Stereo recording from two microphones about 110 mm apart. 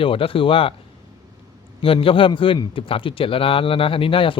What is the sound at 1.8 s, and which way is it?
Speech, 55° left (ahead or behind).